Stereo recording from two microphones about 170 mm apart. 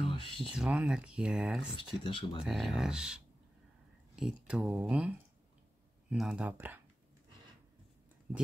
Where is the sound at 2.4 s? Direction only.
Centre (ahead or behind).